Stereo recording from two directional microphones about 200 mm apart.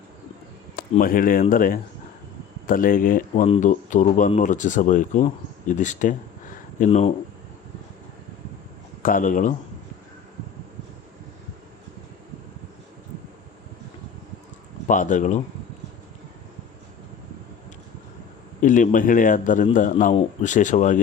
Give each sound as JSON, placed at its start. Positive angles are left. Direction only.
{"t": 0.8, "sound": "speech", "side_deg": 45}
{"t": 9.0, "sound": "speech", "side_deg": 40}
{"t": 14.8, "sound": "speech", "side_deg": 40}
{"t": 18.6, "sound": "speech", "side_deg": 40}